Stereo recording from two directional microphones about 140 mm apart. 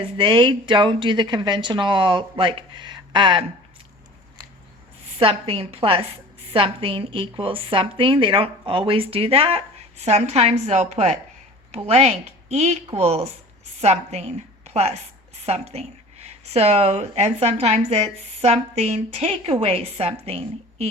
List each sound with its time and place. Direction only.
0.2 s a woman's voice: 35° right (ahead or behind)
5.2 s a woman's voice: 45° right (ahead or behind)